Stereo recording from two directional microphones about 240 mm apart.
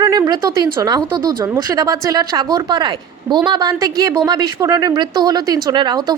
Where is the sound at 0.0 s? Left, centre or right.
Centre.